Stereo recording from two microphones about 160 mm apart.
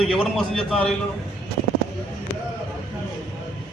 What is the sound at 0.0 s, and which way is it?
Speech, centre (ahead or behind).